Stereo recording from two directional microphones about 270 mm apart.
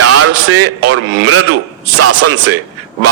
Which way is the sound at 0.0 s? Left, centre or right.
Right.